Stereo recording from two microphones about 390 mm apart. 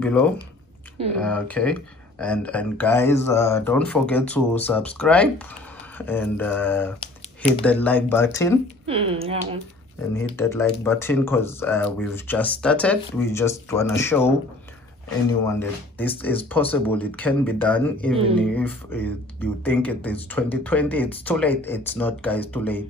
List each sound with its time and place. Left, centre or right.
0.0 s speech: centre
8.8 s speech: centre
10.1 s speech: centre
16.0 s speech: centre